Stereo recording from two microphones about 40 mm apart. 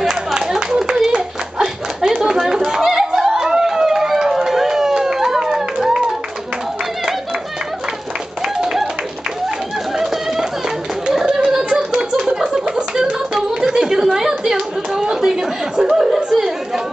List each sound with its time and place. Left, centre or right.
0.1 s clapping: centre
8.5 s clapping: centre
9.9 s a sound: centre
16.3 s chatter: centre